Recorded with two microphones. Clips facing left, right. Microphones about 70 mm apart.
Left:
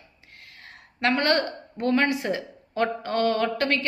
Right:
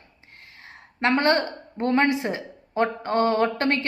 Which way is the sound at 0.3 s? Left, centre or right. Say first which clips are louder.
Right 1 dB; right.